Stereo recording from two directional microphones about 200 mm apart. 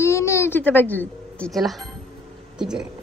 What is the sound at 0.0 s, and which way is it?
A woman's voice, 15° left (ahead or behind).